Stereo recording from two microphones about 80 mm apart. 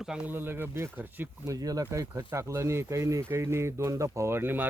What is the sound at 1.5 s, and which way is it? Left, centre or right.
Speech, right.